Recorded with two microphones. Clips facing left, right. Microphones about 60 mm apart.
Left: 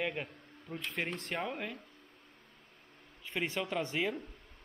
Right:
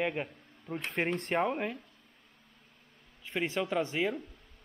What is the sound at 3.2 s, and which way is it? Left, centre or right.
Speech, centre.